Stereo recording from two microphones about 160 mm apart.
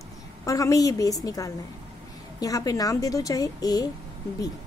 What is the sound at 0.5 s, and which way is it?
A woman's voice, 20° left (ahead or behind).